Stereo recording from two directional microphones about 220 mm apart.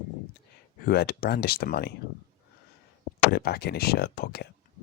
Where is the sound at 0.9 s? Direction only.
45° left (ahead or behind).